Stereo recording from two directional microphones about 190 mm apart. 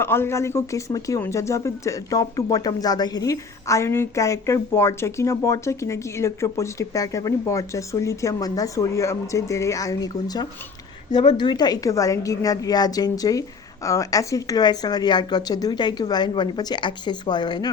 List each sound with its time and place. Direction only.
0.0 s a woman's voice: 10° left (ahead or behind)